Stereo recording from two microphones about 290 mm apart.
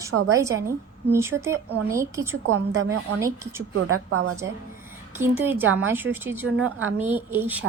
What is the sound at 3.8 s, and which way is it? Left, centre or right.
Speech, right.